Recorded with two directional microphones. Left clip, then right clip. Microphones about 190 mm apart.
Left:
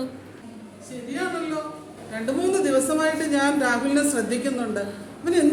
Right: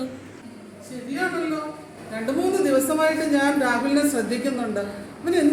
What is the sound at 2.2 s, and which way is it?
A woman's voice, centre (ahead or behind).